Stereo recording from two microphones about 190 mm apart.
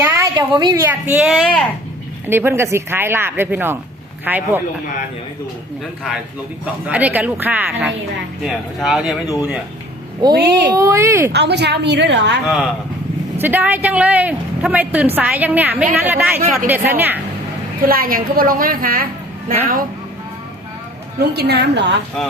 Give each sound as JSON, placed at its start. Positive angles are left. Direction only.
{"t": 0.3, "sound": "a woman's voice", "side_deg": -20}
{"t": 2.2, "sound": "a woman's voice", "side_deg": -10}
{"t": 6.8, "sound": "a woman's voice", "side_deg": -5}
{"t": 10.2, "sound": "a woman's voice", "side_deg": -20}
{"t": 11.3, "sound": "a woman's voice", "side_deg": -60}
{"t": 12.5, "sound": "a woman's voice", "side_deg": 0}
{"t": 17.8, "sound": "a woman's voice", "side_deg": -50}
{"t": 21.3, "sound": "a woman's voice", "side_deg": -60}
{"t": 22.2, "sound": "speech", "side_deg": 0}